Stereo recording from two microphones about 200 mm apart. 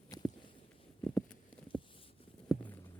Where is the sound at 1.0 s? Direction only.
10° left (ahead or behind).